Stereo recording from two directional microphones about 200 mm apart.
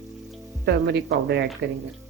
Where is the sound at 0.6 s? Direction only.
60° right (ahead or behind).